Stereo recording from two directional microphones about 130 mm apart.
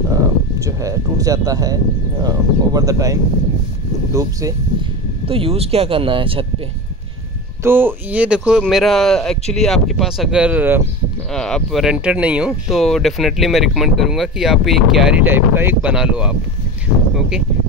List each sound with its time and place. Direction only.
0.1 s speech: 25° right (ahead or behind)
5.2 s speech: 45° right (ahead or behind)
7.6 s speech: 15° right (ahead or behind)
11.3 s speech: 5° left (ahead or behind)
15.2 s speech: 15° right (ahead or behind)